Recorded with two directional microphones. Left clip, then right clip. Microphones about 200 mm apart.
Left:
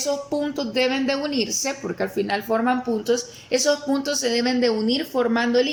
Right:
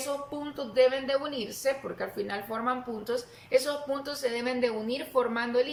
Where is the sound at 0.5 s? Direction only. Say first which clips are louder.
Right 1 dB; 45° left (ahead or behind).